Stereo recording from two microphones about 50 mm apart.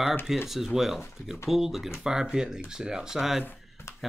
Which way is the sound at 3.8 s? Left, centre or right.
Left.